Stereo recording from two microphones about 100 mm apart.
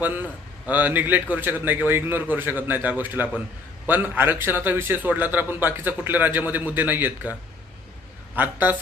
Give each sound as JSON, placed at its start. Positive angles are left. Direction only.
{"t": 0.0, "sound": "a man's voice", "side_deg": -20}
{"t": 8.4, "sound": "a man's voice", "side_deg": -20}